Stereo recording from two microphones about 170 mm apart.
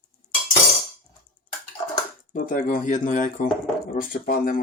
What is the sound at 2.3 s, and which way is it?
Speech, 50° left (ahead or behind).